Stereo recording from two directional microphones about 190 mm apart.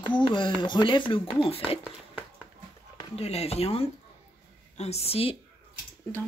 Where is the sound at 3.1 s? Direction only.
30° left (ahead or behind).